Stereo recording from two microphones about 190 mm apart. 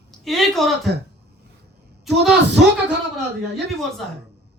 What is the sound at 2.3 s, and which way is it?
Speech, 65° right (ahead or behind).